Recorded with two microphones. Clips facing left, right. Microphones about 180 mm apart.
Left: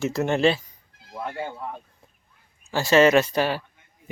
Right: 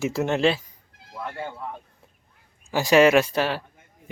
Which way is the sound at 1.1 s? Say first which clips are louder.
Left 2 dB; 20° left (ahead or behind).